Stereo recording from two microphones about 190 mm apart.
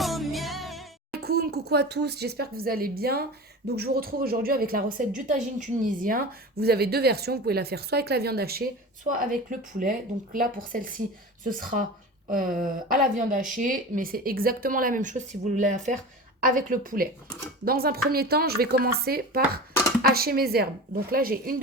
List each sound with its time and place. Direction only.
0.0 s music: centre (ahead or behind)
1.2 s speech: 55° right (ahead or behind)